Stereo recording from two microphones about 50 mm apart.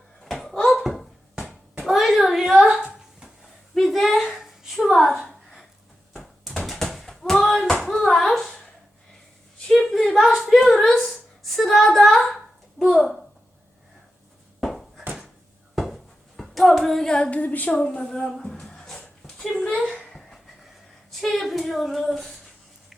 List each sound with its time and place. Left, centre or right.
0.3 s bouncing: centre
0.7 s a sound: centre
3.8 s a sound: centre
6.1 s a sound: centre
14.6 s bouncing: centre
15.7 s a sound: centre
16.4 s hands: centre
17.1 s speech: centre
17.3 s a woman's voice: left
17.7 s speech: centre
18.7 s dog: centre
21.2 s female singing: centre